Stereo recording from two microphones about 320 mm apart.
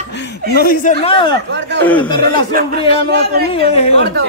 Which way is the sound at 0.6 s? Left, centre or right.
Left.